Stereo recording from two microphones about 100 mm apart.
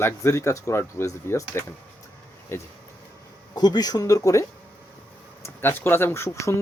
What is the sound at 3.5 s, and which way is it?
Speech, 45° left (ahead or behind).